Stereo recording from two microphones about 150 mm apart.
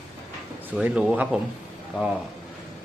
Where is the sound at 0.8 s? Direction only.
5° right (ahead or behind).